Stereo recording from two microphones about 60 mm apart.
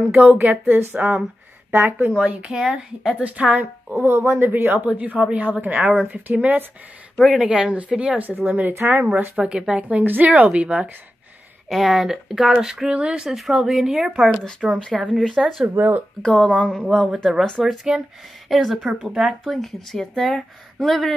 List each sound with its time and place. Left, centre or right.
0.5 s a woman's voice: right
1.7 s speech: right
2.1 s speech: centre
3.2 s a woman's voice: right
3.9 s speech: right
4.7 s a woman's voice: right
7.3 s speech: centre
8.3 s a woman's voice: right
9.4 s a woman's voice: centre
11.7 s speech: centre
15.7 s speech: right
16.2 s speech: centre
17.9 s speech: centre
18.5 s speech: centre